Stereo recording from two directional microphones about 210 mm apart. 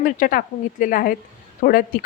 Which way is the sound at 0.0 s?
40° left (ahead or behind).